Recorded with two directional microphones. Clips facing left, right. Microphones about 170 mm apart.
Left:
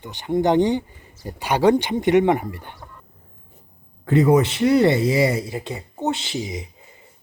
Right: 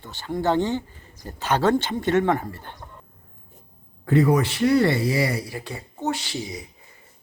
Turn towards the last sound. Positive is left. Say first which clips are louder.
# left 3 dB
turn(degrees=20)  # may be behind; listen again after turning